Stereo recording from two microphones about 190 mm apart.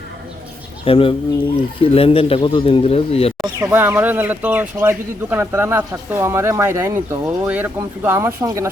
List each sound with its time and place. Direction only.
0.9 s speech: 30° left (ahead or behind)
3.4 s speech: 15° right (ahead or behind)